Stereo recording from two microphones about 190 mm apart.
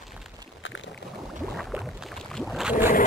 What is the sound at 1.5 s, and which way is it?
Boat, centre (ahead or behind).